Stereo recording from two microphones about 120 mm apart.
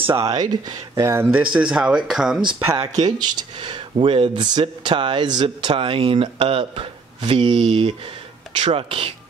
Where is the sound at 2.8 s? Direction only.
35° right (ahead or behind).